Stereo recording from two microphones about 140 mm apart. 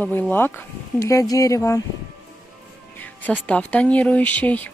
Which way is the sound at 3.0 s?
10° left (ahead or behind).